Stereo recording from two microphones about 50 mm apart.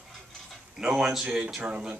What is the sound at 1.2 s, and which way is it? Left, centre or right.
Speech, right.